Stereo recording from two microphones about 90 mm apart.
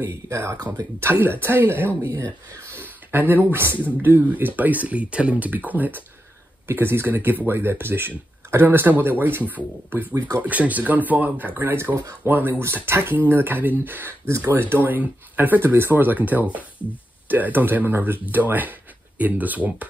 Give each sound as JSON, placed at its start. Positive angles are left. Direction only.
{"t": 0.1, "sound": "speech", "side_deg": -35}
{"t": 10.1, "sound": "speech", "side_deg": -40}
{"t": 10.4, "sound": "speech", "side_deg": -15}
{"t": 14.2, "sound": "speech", "side_deg": -35}
{"t": 14.5, "sound": "speech", "side_deg": -25}